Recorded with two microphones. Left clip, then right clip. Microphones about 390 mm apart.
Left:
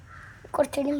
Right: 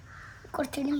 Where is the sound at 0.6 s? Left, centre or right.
Centre.